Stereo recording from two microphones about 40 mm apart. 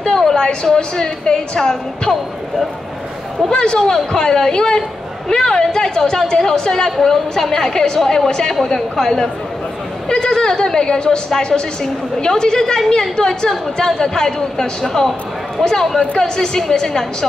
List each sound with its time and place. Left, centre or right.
0.0 s a sound: centre
0.7 s a woman's voice: centre
3.5 s a woman's voice: left